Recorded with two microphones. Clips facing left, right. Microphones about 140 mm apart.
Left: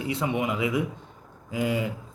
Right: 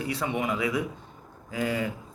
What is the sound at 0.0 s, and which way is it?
Speech, 20° left (ahead or behind).